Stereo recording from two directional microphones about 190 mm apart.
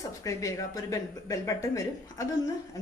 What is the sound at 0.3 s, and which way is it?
A woman's voice, 20° left (ahead or behind).